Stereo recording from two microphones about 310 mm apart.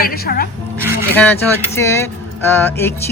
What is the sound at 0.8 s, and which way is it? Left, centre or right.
A woman's voice, centre.